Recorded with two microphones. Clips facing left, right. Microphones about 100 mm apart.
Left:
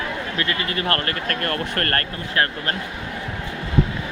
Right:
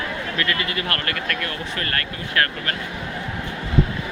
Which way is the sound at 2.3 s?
25° left (ahead or behind).